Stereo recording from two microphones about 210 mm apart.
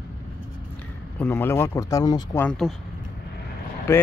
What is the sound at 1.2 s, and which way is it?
Speech, 10° left (ahead or behind).